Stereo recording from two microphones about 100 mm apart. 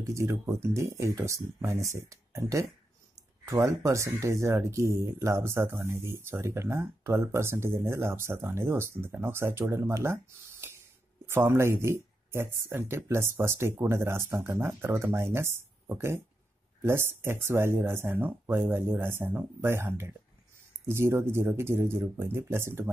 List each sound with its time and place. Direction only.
0.0 s speech: 30° right (ahead or behind)
11.2 s speech: 25° right (ahead or behind)